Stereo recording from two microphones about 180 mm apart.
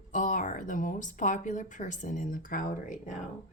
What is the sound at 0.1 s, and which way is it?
Speech, 45° left (ahead or behind).